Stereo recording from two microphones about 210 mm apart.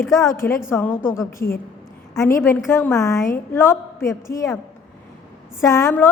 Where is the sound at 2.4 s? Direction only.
10° left (ahead or behind).